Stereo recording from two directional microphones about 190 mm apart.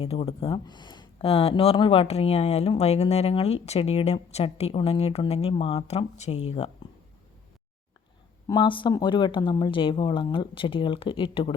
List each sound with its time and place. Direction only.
0.0 s speech: 30° left (ahead or behind)
6.8 s a sound: 30° left (ahead or behind)
8.4 s speech: 25° left (ahead or behind)